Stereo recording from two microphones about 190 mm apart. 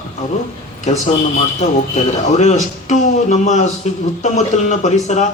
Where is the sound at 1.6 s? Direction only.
35° left (ahead or behind).